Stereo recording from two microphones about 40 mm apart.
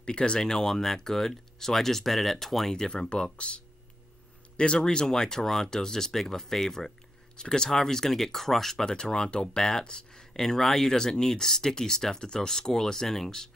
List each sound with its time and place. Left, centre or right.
0.0 s speech: left; by 2.8 s centre
3.0 s speech: left